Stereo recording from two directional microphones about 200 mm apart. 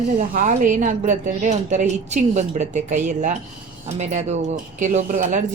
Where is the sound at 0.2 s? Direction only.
40° right (ahead or behind).